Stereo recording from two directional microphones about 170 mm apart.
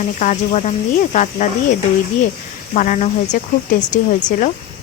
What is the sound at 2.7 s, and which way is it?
Speech, 45° left (ahead or behind).